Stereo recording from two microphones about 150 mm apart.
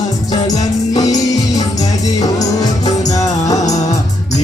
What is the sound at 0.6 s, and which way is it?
Music, 25° left (ahead or behind).